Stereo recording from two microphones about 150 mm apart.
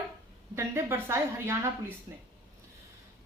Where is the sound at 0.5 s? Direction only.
15° right (ahead or behind).